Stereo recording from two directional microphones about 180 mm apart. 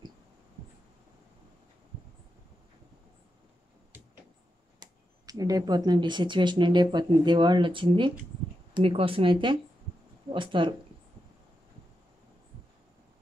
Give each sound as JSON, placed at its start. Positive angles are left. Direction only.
{"t": 4.7, "sound": "speech", "side_deg": -20}